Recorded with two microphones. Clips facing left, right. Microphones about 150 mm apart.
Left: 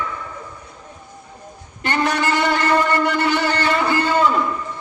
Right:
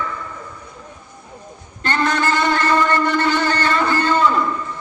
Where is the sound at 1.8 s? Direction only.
10° left (ahead or behind).